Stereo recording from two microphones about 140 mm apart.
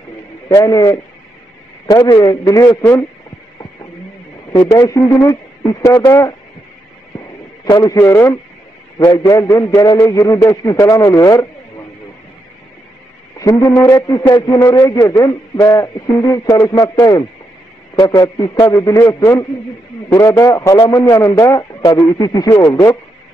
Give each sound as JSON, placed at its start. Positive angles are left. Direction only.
{"t": 0.5, "sound": "a man's voice", "side_deg": 20}
{"t": 4.6, "sound": "a man's voice", "side_deg": 20}
{"t": 7.7, "sound": "a man's voice", "side_deg": 25}
{"t": 8.9, "sound": "a man's voice", "side_deg": 35}
{"t": 13.4, "sound": "a man's voice", "side_deg": 20}